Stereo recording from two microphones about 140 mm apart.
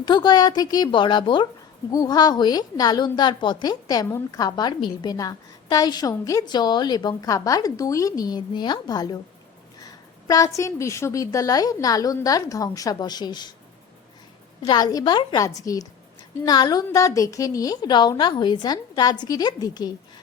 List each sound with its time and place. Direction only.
0.0 s a woman's voice: 30° left (ahead or behind)
9.8 s a sound: 25° left (ahead or behind)
10.6 s a woman's voice: 20° left (ahead or behind)
14.7 s a woman's voice: 30° left (ahead or behind)